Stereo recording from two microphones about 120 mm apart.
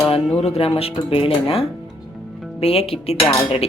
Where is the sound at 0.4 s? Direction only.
55° left (ahead or behind).